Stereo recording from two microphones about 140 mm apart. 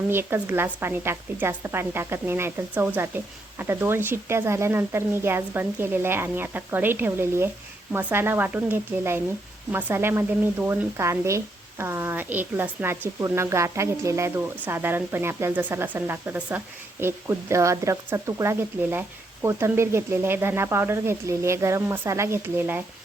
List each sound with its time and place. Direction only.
0.1 s speech: 15° right (ahead or behind)